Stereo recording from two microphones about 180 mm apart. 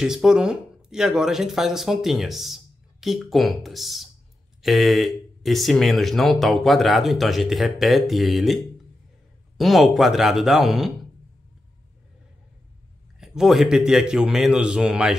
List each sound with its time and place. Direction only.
0.0 s speech: 5° right (ahead or behind)
13.2 s speech: centre (ahead or behind)